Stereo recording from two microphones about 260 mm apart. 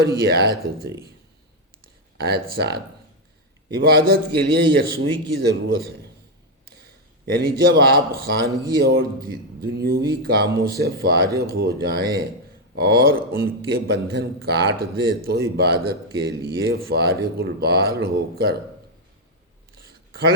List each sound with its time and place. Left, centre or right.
0.0 s a man's voice: right
2.1 s a man's voice: right
7.3 s a man's voice: right